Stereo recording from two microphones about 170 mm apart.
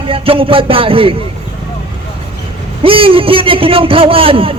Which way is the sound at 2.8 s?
30° right (ahead or behind).